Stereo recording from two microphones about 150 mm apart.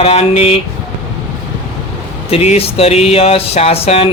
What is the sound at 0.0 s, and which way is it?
Speech, 45° left (ahead or behind).